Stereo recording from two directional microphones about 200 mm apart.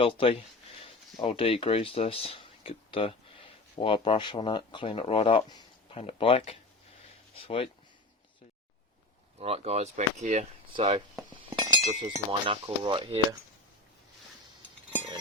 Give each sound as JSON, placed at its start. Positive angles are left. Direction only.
{"t": 0.0, "sound": "speech", "side_deg": 25}
{"t": 9.4, "sound": "speech", "side_deg": -30}
{"t": 11.5, "sound": "chink", "side_deg": -20}
{"t": 12.0, "sound": "speech", "side_deg": -25}